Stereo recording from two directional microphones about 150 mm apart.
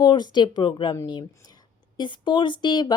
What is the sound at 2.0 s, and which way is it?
Speech, 30° left (ahead or behind).